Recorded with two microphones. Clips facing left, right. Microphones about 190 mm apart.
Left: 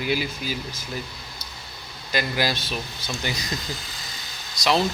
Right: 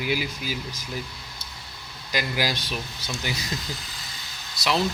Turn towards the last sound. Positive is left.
turn(degrees=40)  # may be behind; listen again after turning